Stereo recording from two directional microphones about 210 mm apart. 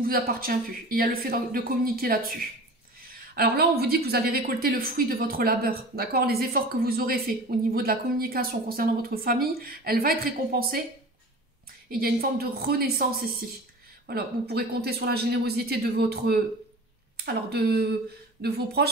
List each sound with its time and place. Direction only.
0.0 s speech: 45° right (ahead or behind)
3.3 s speech: 50° right (ahead or behind)
11.9 s speech: 45° right (ahead or behind)